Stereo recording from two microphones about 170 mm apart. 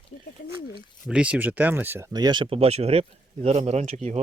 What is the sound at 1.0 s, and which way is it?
Speech, 5° right (ahead or behind).